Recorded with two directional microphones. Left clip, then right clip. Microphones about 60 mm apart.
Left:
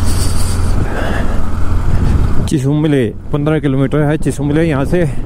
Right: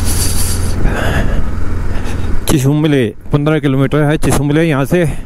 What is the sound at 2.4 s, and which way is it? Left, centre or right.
Speech, right.